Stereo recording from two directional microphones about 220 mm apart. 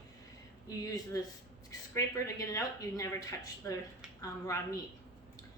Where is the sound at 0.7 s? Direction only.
15° left (ahead or behind).